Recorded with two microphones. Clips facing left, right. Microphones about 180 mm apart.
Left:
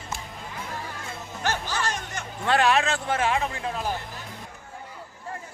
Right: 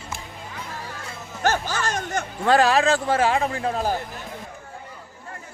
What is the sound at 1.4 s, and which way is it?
Speech, 45° right (ahead or behind).